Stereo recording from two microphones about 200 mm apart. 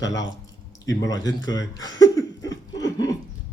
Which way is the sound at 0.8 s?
20° left (ahead or behind).